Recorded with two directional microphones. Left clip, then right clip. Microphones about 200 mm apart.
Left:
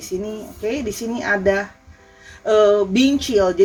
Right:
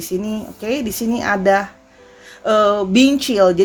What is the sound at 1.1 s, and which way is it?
Speech, 55° right (ahead or behind).